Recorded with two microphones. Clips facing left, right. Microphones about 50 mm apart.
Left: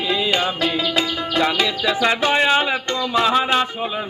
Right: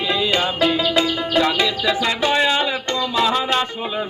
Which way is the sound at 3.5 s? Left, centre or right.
Centre.